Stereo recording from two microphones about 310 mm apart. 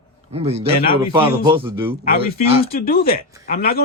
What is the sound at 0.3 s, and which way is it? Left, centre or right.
A man's voice, centre.